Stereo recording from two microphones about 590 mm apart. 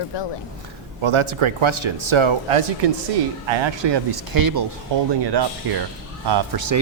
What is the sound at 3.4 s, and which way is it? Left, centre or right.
Speech, right.